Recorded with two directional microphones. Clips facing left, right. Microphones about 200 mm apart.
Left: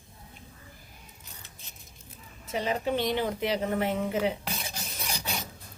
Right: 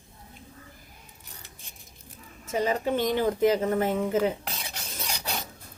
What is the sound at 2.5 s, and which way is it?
Speech, 45° right (ahead or behind).